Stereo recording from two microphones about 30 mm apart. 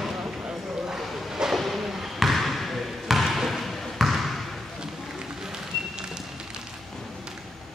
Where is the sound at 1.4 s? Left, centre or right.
Right.